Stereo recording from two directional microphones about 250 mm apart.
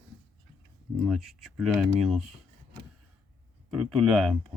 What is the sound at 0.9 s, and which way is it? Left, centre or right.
Speech, centre.